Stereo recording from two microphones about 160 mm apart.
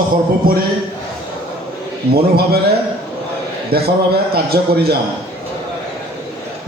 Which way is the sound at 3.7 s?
75° right (ahead or behind).